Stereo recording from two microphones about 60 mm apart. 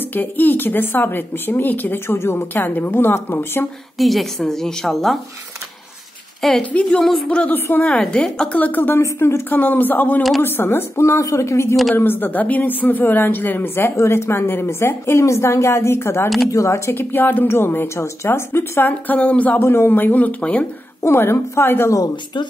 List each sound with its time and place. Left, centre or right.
0.0 s a woman's voice: left
2.0 s a woman's voice: left
4.0 s a woman's voice: centre
6.6 s a woman's voice: centre
9.0 s a woman's voice: left
9.5 s a woman's voice: left
11.9 s a woman's voice: left
13.8 s a woman's voice: left
16.5 s speech: left
17.0 s a woman's voice: left
19.6 s a woman's voice: left
21.0 s a woman's voice: left